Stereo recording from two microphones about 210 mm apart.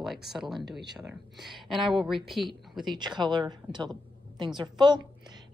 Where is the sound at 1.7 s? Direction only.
20° right (ahead or behind).